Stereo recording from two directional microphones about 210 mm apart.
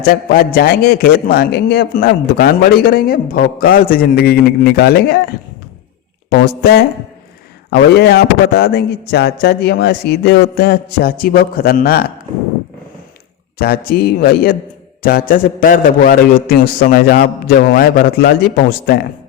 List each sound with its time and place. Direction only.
0.0 s a man's voice: 45° left (ahead or behind)
7.7 s a man's voice: 50° left (ahead or behind)
13.6 s a man's voice: 45° left (ahead or behind)